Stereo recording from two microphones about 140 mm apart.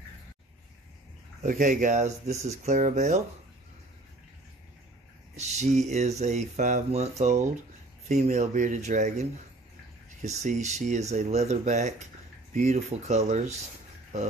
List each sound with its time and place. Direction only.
1.4 s speech: 65° right (ahead or behind)
5.3 s speech: 55° right (ahead or behind)